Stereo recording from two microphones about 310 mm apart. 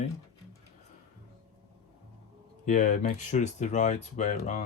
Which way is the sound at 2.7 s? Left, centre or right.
Left.